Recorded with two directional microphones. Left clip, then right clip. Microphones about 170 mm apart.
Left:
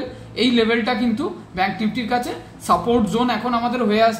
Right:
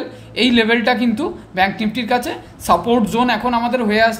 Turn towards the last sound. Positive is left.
turn(degrees=-40)  # may be behind; listen again after turning